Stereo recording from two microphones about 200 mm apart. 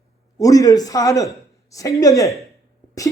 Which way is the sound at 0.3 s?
15° left (ahead or behind).